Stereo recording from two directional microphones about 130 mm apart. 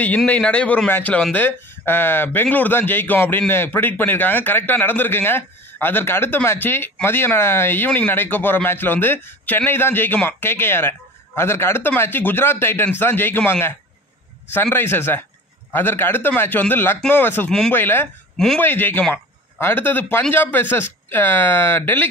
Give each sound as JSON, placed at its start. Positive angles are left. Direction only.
{"t": 0.3, "sound": "speech", "side_deg": 10}
{"t": 17.5, "sound": "speech", "side_deg": 5}
{"t": 17.7, "sound": "speech", "side_deg": 15}